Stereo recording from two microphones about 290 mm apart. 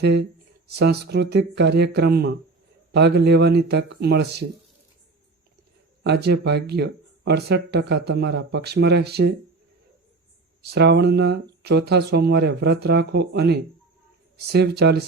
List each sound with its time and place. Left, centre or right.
0.0 s speech: right
6.0 s speech: right
10.7 s speech: right